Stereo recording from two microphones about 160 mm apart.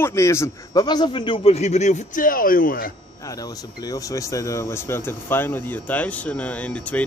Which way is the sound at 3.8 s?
20° left (ahead or behind).